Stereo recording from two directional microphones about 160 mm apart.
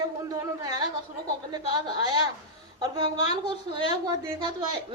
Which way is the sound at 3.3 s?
30° right (ahead or behind).